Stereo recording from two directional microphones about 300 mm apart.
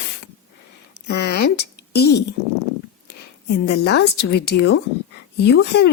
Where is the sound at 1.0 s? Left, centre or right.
Left.